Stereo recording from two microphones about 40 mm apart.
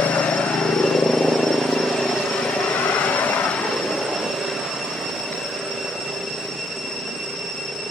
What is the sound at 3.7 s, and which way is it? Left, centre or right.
Vehicle, centre.